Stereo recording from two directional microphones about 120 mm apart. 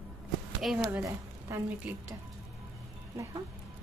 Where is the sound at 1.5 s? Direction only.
20° right (ahead or behind).